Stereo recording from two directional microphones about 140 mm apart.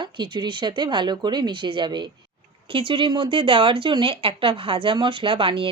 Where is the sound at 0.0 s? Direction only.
35° right (ahead or behind).